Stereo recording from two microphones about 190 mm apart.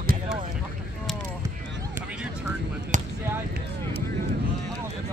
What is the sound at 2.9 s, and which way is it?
Basketball bounce, 40° right (ahead or behind).